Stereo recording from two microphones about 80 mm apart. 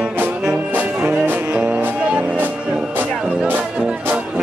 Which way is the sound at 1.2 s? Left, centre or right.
Right.